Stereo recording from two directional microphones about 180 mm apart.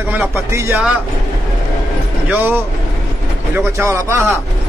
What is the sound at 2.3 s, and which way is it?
Speech, 10° right (ahead or behind).